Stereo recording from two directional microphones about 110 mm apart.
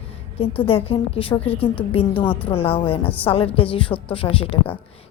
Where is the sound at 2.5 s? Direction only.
60° left (ahead or behind).